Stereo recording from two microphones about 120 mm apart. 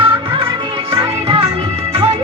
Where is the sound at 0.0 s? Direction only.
50° right (ahead or behind).